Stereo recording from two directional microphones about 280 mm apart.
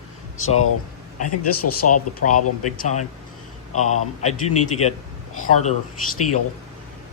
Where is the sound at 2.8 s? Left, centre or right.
Left.